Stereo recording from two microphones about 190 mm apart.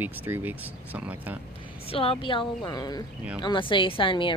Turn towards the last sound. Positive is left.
turn(degrees=25)  # may be behind; listen again after turning